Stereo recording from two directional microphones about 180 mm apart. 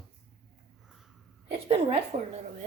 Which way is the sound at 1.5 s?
30° right (ahead or behind).